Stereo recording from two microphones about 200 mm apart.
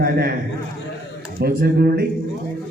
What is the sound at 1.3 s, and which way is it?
Speech, 50° right (ahead or behind).